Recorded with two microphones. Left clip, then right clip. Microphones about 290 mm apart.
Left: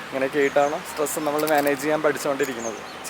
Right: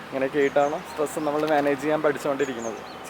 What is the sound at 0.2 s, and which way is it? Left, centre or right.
Speech, centre.